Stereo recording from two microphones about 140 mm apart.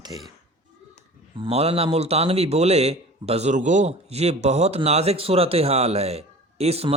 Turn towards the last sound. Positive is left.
turn(degrees=-45)  # may be behind; listen again after turning